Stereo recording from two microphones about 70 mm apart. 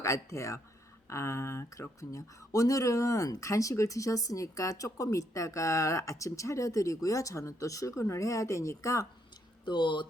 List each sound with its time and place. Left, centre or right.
0.0 s a woman's voice: left